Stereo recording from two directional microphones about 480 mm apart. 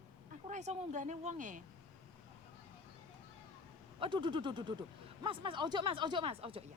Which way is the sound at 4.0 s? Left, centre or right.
Centre.